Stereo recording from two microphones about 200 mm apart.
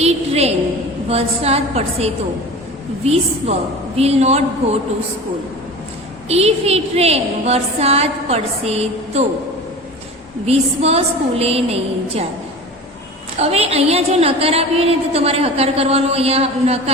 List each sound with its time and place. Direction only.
0.0 s a sound: 30° right (ahead or behind)
1.0 s a woman's voice: 30° right (ahead or behind)
6.2 s a woman's voice: 30° right (ahead or behind)
10.4 s a woman's voice: 30° right (ahead or behind)
13.4 s a woman's voice: 30° right (ahead or behind)